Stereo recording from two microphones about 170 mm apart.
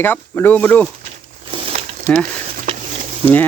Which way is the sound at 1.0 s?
30° right (ahead or behind).